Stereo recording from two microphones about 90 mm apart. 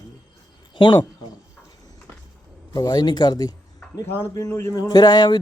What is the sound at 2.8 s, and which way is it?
Speech, 55° left (ahead or behind).